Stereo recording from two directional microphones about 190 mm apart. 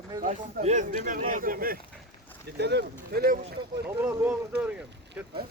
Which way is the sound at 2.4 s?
60° right (ahead or behind).